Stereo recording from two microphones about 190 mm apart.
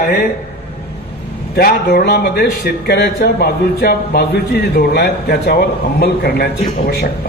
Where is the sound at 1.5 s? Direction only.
55° left (ahead or behind).